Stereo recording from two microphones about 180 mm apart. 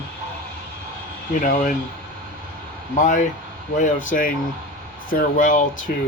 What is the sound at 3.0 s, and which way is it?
Speech, 45° left (ahead or behind).